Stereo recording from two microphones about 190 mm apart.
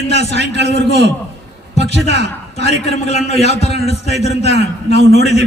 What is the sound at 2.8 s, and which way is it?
A man's voice, 35° left (ahead or behind).